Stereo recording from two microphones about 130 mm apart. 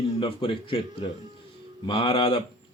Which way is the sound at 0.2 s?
40° left (ahead or behind).